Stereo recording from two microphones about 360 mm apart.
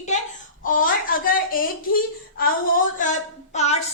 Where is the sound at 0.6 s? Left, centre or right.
Left.